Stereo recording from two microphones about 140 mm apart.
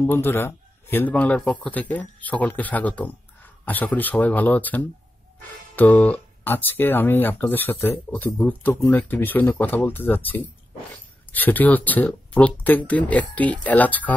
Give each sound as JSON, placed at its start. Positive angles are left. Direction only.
{"t": 0.0, "sound": "speech", "side_deg": 15}